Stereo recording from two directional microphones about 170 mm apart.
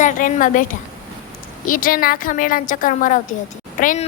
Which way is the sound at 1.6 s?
55° left (ahead or behind).